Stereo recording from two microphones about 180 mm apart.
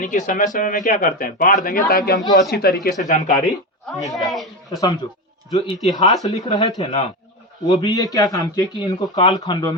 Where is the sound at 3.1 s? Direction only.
50° left (ahead or behind).